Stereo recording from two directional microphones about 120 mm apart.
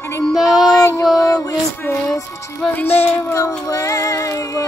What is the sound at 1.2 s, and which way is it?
Music, 30° left (ahead or behind).